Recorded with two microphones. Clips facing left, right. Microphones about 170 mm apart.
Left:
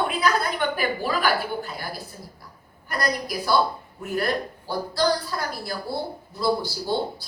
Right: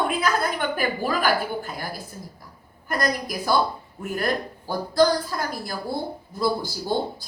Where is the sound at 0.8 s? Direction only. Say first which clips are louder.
Right 1 dB; 45° right (ahead or behind).